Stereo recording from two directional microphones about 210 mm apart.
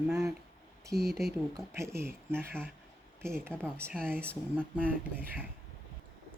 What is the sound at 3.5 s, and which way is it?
Speech, 5° left (ahead or behind).